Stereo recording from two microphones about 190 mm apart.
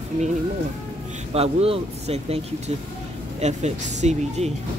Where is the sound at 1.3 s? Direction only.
30° right (ahead or behind).